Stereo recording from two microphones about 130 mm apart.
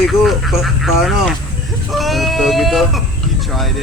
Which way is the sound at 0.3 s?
Centre (ahead or behind).